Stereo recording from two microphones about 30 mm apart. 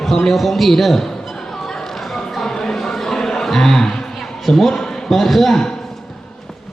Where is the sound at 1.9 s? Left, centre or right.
Centre.